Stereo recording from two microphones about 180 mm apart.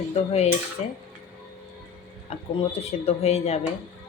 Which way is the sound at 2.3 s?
35° left (ahead or behind).